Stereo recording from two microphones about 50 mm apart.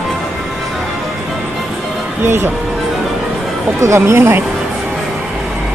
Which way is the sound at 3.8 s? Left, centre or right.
Right.